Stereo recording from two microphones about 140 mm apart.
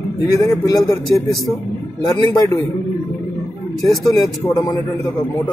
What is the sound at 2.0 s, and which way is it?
Speech, 25° left (ahead or behind).